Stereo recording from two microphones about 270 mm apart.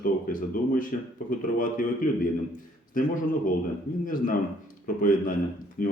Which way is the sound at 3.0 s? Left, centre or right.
Left.